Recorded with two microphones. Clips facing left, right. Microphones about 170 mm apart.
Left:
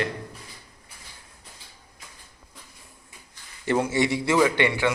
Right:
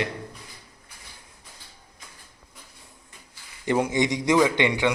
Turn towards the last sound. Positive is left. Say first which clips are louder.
# even
turn(degrees=-15)  # may be behind; listen again after turning